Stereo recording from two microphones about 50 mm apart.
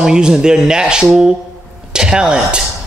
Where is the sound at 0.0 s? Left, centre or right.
Centre.